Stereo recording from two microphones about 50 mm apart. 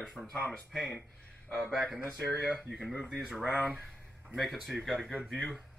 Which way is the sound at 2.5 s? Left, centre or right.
Centre.